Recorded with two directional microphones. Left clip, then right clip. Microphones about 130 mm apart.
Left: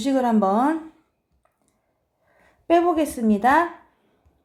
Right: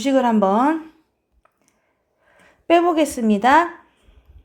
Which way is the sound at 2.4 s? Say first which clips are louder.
Right 3 dB; 25° right (ahead or behind).